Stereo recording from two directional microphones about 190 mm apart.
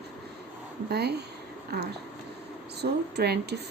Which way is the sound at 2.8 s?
60° right (ahead or behind).